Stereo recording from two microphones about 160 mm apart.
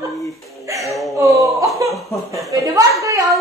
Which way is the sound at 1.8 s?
Centre (ahead or behind).